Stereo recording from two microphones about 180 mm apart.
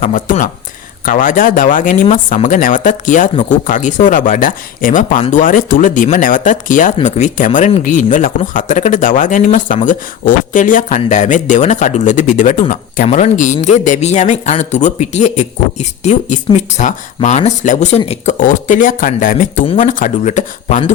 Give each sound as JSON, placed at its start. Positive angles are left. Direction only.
{"t": 0.0, "sound": "speech", "side_deg": 45}